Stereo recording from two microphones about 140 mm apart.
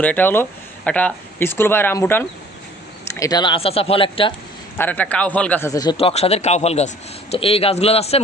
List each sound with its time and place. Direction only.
0.0 s speech: 10° left (ahead or behind)
3.2 s speech: 30° left (ahead or behind)
4.8 s speech: 10° left (ahead or behind); by 6.0 s 25° left (ahead or behind)
6.0 s speech: 45° left (ahead or behind)